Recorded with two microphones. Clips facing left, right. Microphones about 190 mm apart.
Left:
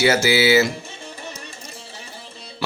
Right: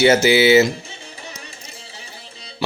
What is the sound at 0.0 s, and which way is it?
Music, 20° right (ahead or behind).